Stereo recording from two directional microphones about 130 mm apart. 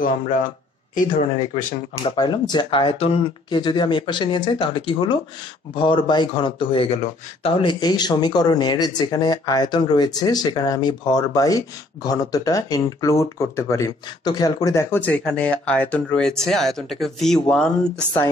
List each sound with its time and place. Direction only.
0.9 s speech: 85° left
2.0 s speech: 35° left (ahead or behind)
3.4 s speech: 35° left (ahead or behind)
7.8 s speech: 30° left (ahead or behind); by 17.6 s 5° left (ahead or behind)